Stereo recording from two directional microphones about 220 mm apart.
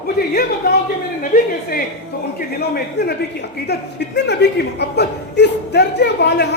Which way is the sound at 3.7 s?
50° left (ahead or behind).